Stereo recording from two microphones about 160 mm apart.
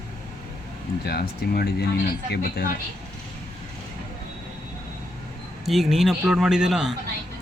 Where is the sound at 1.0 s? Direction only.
80° left.